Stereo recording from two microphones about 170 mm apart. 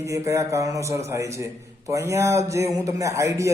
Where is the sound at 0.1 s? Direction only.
20° right (ahead or behind).